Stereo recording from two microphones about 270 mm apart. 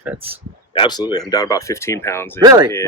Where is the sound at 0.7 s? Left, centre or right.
Centre.